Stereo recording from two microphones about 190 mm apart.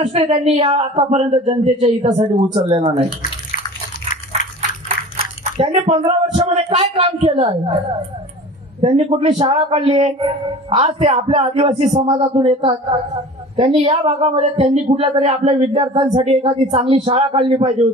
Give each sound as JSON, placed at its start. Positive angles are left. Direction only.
{"t": 0.0, "sound": "speech", "side_deg": -30}
{"t": 4.3, "sound": "a sound", "side_deg": -35}
{"t": 5.4, "sound": "speech", "side_deg": -35}